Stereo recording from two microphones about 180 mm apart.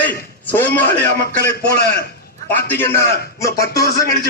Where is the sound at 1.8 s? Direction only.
60° left (ahead or behind).